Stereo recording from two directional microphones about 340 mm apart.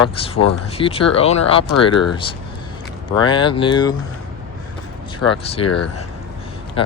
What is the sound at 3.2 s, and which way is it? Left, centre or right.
Speech, centre.